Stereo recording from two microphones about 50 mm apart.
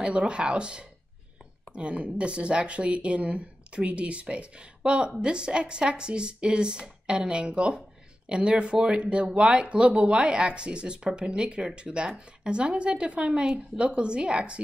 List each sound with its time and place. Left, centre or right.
0.0 s speech: right